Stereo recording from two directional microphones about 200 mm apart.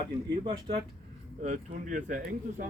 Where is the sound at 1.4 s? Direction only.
35° right (ahead or behind).